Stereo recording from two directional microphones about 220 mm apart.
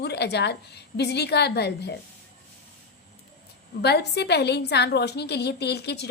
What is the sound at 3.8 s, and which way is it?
A woman's voice, 50° left (ahead or behind).